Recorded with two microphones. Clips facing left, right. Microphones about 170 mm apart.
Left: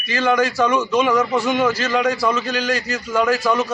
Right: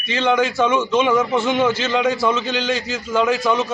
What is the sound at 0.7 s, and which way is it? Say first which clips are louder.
Speech: even; 20° right (ahead or behind).